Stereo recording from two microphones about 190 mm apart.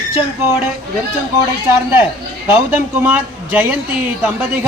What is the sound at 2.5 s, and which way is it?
A woman's voice, 5° right (ahead or behind).